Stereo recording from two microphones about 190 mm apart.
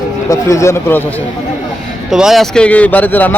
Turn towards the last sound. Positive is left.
turn(degrees=10)  # may be behind; listen again after turning